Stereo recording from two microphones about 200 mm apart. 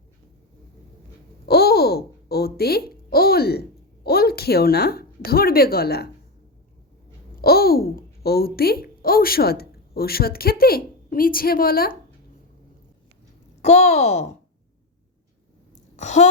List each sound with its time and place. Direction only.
1.5 s babbling: 50° left (ahead or behind)
7.4 s a child's voice: 50° left (ahead or behind)
13.6 s a woman's voice: 35° left (ahead or behind)
16.0 s a woman's voice: 35° left (ahead or behind)